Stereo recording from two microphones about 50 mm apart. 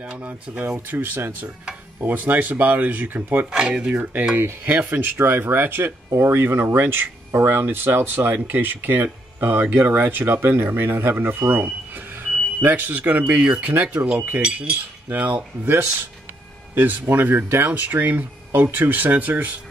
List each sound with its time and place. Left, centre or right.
0.5 s speech: right
0.8 s speech: right
3.4 s speech: right
4.6 s speech: right
6.1 s speech: right
6.6 s speech: right
14.4 s cutlery: centre
15.0 s speech: right
16.7 s speech: right
17.6 s speech: right
17.9 s speech: right